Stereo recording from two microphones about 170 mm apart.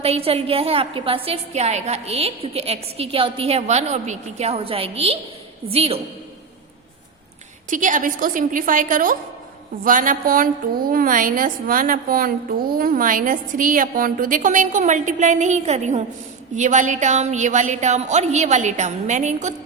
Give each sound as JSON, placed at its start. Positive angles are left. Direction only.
{"t": 0.0, "sound": "a woman's voice", "side_deg": -35}
{"t": 7.7, "sound": "a woman's voice", "side_deg": -50}